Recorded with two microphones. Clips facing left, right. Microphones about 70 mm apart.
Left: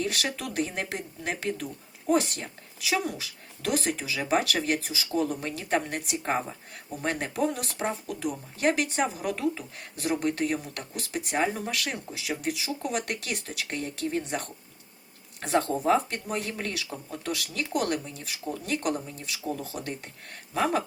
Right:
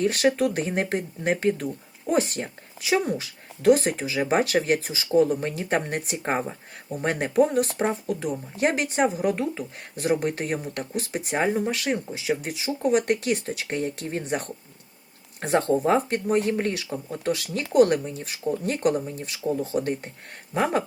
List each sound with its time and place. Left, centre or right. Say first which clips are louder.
0.0 s speech: right 9 dB; right